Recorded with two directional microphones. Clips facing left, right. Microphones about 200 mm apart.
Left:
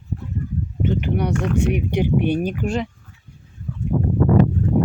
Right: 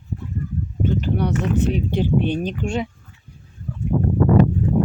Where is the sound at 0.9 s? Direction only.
15° left (ahead or behind).